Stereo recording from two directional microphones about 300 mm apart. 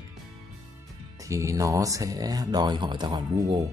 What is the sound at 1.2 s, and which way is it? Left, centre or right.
Speech, centre.